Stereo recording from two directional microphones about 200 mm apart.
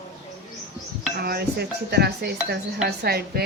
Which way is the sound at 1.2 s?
50° right (ahead or behind).